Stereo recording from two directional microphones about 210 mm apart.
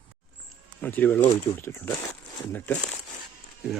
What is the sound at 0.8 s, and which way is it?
Speech, 10° left (ahead or behind).